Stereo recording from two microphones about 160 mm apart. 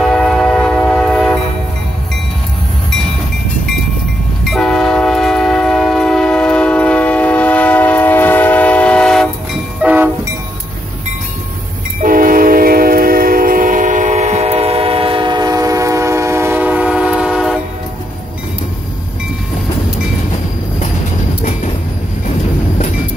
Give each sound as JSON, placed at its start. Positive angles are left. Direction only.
{"t": 0.0, "sound": "train", "side_deg": 0}
{"t": 4.5, "sound": "train", "side_deg": 0}
{"t": 9.8, "sound": "train", "side_deg": -10}
{"t": 12.0, "sound": "train", "side_deg": -60}
{"t": 21.4, "sound": "train", "side_deg": 50}